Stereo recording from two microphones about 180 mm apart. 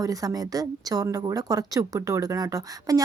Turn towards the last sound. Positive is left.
turn(degrees=-20)  # may be behind; listen again after turning